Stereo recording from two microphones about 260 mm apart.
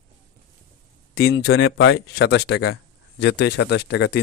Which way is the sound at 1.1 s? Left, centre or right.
Left.